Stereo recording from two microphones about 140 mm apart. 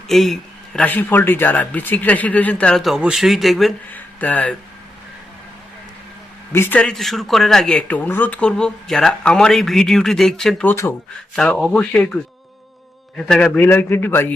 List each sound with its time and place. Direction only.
0.1 s speech: centre (ahead or behind)
3.9 s speech: 10° left (ahead or behind)
6.5 s speech: 15° left (ahead or behind)
10.7 s speech: 15° left (ahead or behind)
11.3 s speech: 5° left (ahead or behind)
13.1 s speech: 5° left (ahead or behind)